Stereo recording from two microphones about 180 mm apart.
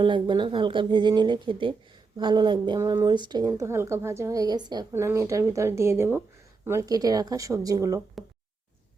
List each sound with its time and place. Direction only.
0.0 s speech: 25° right (ahead or behind)